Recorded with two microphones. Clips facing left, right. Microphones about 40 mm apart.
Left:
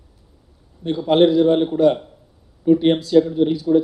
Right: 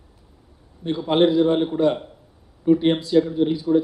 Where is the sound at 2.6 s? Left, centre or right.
Centre.